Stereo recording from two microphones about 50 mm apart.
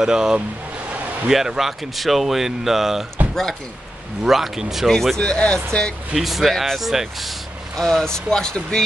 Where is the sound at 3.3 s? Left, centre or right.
Centre.